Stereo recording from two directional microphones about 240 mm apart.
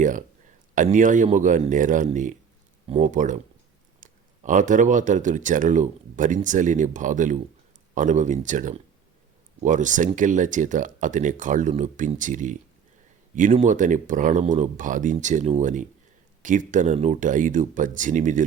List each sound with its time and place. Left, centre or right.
0.0 s speech: right